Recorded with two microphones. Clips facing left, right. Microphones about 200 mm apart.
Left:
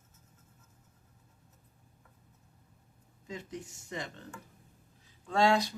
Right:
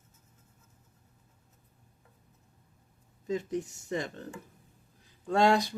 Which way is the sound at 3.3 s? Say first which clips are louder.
Right 10 dB; 45° right (ahead or behind).